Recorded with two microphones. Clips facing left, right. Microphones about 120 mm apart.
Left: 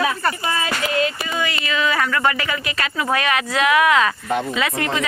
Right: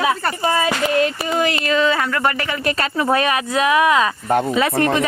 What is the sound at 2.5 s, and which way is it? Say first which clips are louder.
Speech: right 4 dB; 40° right (ahead or behind).